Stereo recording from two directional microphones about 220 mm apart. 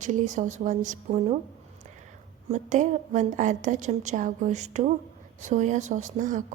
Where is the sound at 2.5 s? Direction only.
35° right (ahead or behind).